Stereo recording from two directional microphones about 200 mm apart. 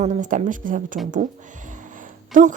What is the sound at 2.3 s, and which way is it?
Speech, 40° right (ahead or behind).